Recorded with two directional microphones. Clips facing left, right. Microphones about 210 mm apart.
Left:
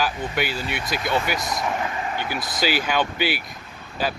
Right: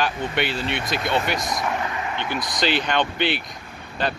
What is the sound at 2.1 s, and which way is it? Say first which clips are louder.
Speech: right 1 dB; 5° left (ahead or behind).